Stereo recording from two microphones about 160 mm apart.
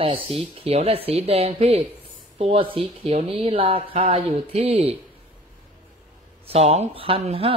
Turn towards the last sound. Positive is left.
turn(degrees=-35)  # may be behind; listen again after turning